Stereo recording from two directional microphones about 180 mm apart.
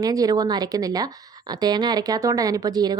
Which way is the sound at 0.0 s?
20° right (ahead or behind).